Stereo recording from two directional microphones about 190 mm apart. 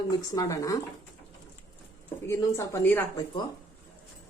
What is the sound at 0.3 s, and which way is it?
Speech, 20° left (ahead or behind).